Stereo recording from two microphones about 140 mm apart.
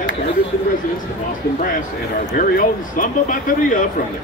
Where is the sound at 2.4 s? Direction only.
75° left (ahead or behind).